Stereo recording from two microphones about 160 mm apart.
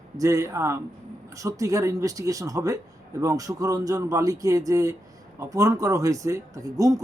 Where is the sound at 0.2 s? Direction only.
20° right (ahead or behind).